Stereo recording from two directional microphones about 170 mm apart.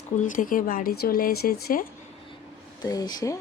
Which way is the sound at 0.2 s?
50° left (ahead or behind).